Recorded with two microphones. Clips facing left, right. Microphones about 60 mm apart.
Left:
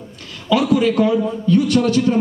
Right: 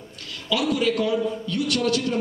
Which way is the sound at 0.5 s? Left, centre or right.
Left.